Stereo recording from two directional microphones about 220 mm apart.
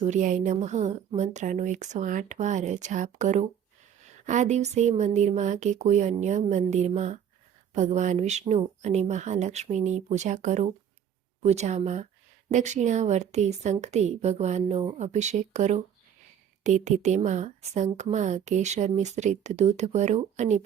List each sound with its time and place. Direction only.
0.1 s a woman's voice: 35° right (ahead or behind)